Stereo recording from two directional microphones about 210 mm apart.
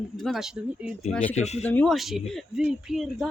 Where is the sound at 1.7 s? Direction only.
5° left (ahead or behind).